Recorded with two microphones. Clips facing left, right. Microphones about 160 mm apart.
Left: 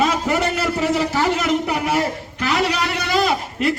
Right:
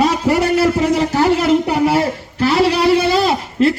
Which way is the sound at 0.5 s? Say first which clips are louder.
Right 6 dB; 40° right (ahead or behind).